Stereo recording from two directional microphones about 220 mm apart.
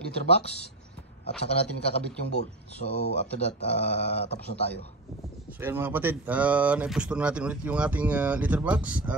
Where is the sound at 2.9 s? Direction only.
50° left (ahead or behind).